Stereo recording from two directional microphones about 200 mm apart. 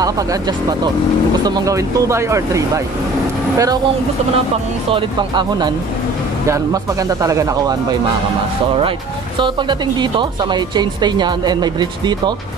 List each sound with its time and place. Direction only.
0.0 s speech: 20° right (ahead or behind)
4.9 s speech: 20° right (ahead or behind)
9.4 s speech: 25° right (ahead or behind)